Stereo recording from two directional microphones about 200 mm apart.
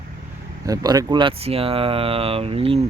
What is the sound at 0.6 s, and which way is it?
Speech, 20° right (ahead or behind).